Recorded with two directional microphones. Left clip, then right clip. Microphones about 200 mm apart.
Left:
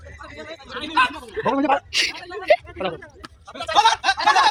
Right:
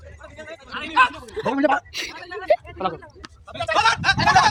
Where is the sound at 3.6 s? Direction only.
45° left (ahead or behind).